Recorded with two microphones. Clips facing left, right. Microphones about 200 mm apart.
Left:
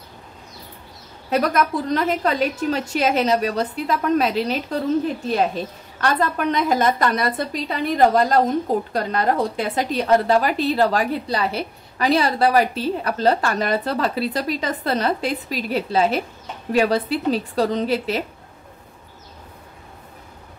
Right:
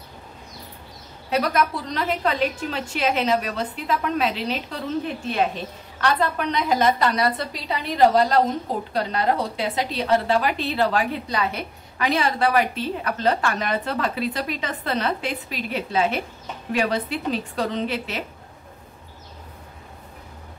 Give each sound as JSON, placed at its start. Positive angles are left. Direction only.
{"t": 1.3, "sound": "a woman's voice", "side_deg": 50}